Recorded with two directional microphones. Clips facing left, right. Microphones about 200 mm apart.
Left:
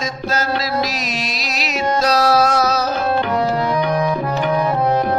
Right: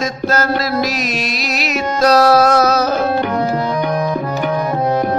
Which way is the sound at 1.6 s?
55° right (ahead or behind).